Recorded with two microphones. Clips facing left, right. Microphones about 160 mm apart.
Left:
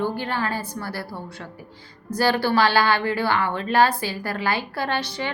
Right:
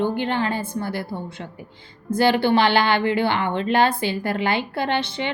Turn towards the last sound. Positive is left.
turn(degrees=-25)  # may be behind; listen again after turning